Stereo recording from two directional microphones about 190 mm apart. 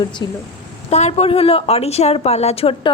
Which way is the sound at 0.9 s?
35° left (ahead or behind).